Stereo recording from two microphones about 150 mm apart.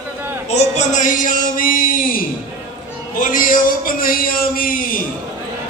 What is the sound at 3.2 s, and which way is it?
Speech, 65° left (ahead or behind).